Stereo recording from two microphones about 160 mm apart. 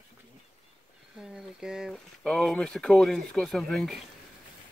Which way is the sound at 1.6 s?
5° right (ahead or behind).